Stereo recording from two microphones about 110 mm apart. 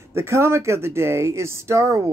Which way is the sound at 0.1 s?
25° right (ahead or behind).